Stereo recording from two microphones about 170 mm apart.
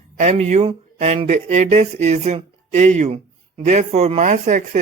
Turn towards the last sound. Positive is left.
turn(degrees=-45)  # may be behind; listen again after turning